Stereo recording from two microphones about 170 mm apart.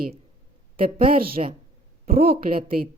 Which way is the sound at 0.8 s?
60° right (ahead or behind).